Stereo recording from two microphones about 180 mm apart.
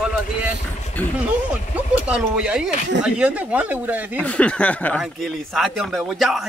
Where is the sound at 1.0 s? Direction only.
10° left (ahead or behind).